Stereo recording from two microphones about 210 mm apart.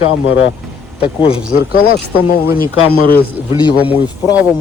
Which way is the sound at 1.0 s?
25° left (ahead or behind).